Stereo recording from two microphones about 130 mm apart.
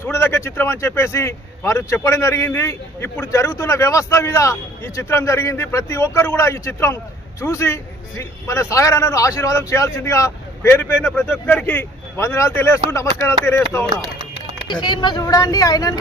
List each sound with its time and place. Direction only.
0.0 s speech: 20° left (ahead or behind)
14.7 s speech: 35° left (ahead or behind)